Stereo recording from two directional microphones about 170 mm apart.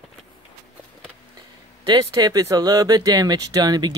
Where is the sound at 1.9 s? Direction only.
25° right (ahead or behind).